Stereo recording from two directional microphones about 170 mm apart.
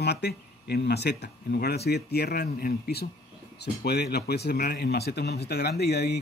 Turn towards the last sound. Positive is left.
turn(degrees=75)  # may be behind; listen again after turning